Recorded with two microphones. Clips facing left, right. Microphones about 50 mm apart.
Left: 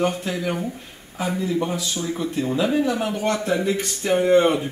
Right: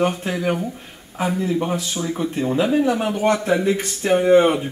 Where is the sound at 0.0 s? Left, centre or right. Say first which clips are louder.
Right 2 dB; right.